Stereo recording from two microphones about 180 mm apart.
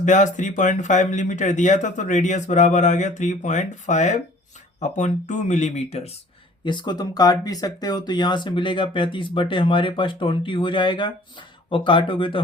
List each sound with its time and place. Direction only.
0.0 s speech: 45° left (ahead or behind)
6.7 s speech: 25° left (ahead or behind)